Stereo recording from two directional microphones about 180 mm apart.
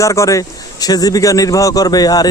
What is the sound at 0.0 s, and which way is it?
Speech, 15° left (ahead or behind).